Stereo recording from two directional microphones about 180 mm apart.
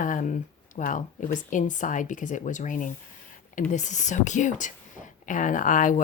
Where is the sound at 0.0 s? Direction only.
45° left (ahead or behind).